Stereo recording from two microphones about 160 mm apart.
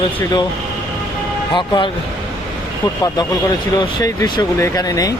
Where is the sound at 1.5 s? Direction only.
30° left (ahead or behind).